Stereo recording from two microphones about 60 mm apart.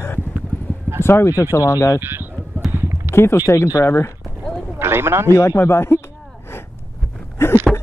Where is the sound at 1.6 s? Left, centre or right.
Left.